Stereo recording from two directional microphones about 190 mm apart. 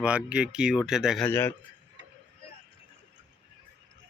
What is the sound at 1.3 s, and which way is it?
Speech, 15° left (ahead or behind).